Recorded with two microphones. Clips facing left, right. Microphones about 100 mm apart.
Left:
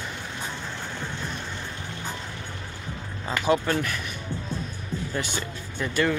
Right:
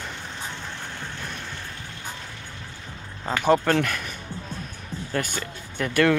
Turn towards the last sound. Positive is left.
turn(degrees=-65)  # may be behind; listen again after turning